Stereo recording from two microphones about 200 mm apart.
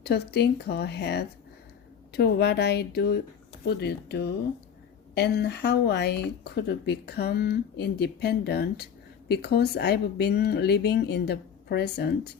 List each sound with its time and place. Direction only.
0.0 s a woman's voice: 55° left (ahead or behind)